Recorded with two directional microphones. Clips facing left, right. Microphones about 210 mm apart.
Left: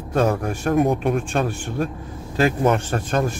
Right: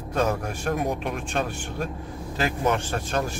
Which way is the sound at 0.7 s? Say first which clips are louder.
Left 11 dB; 50° left (ahead or behind).